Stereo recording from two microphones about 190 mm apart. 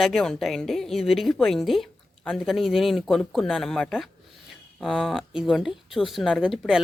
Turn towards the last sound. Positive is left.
turn(degrees=-5)  # may be behind; listen again after turning